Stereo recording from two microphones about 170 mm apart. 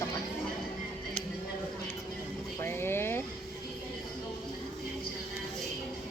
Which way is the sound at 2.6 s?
15° left (ahead or behind).